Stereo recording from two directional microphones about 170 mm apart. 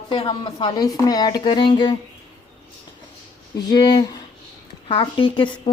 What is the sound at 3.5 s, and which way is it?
A woman's voice, 25° left (ahead or behind).